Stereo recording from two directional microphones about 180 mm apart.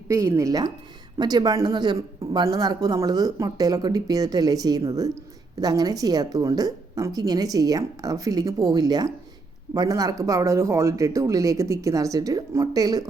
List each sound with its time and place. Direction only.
0.1 s speech: 15° right (ahead or behind)